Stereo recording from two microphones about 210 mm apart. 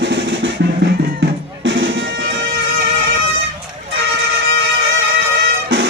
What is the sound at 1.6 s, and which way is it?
Music, 60° right (ahead or behind).